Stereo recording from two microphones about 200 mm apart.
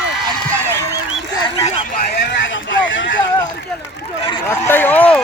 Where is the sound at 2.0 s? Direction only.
55° left (ahead or behind).